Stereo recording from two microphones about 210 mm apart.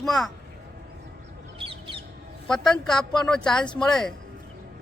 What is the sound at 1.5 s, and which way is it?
Bird, 25° right (ahead or behind).